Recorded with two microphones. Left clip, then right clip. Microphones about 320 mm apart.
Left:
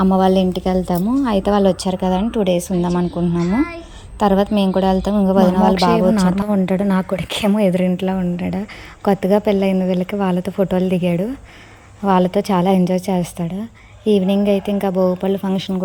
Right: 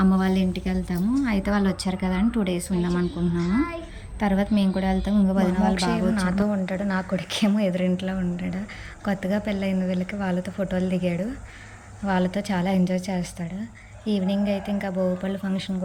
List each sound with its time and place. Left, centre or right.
0.2 s a woman's voice: centre
2.9 s speech: centre
4.2 s a woman's voice: centre